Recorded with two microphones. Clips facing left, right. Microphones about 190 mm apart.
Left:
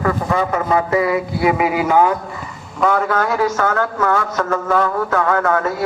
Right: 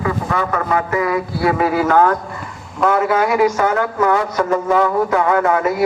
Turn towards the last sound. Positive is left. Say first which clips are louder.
# right 2 dB
turn(degrees=-15)  # may be behind; listen again after turning